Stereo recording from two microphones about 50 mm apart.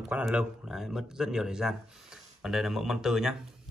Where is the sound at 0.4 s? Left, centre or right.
Centre.